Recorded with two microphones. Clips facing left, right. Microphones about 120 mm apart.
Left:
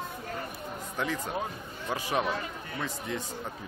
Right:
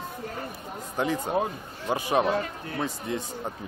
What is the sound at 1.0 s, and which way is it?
Speech, 35° right (ahead or behind).